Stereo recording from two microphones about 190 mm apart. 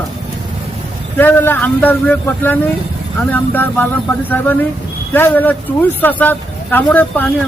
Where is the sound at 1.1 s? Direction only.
10° left (ahead or behind).